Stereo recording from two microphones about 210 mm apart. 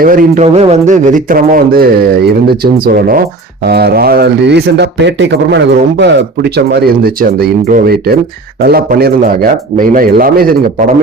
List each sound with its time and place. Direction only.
0.0 s speech: 40° right (ahead or behind)